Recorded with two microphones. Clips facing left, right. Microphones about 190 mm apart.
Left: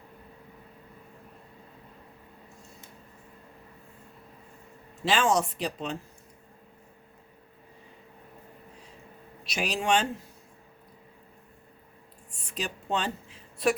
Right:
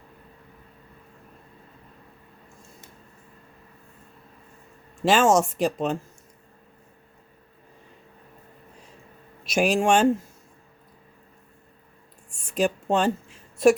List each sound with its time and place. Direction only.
5.0 s speech: 45° right (ahead or behind)
9.5 s speech: 50° right (ahead or behind)
12.3 s a sound: 50° right (ahead or behind)